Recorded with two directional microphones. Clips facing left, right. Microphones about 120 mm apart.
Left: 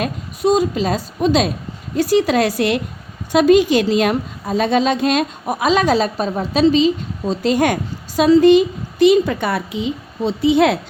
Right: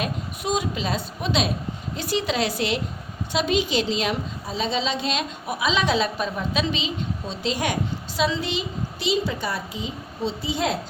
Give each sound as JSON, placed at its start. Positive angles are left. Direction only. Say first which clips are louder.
{"t": 0.0, "sound": "a woman's voice", "louder": "left 9 dB", "side_deg": 40}